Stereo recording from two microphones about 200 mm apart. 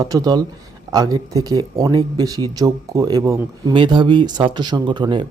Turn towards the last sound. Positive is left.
turn(degrees=-20)  # may be behind; listen again after turning